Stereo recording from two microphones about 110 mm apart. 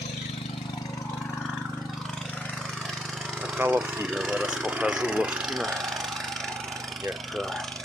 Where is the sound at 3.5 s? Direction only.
15° right (ahead or behind).